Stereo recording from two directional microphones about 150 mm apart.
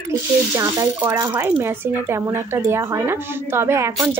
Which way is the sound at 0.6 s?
20° right (ahead or behind).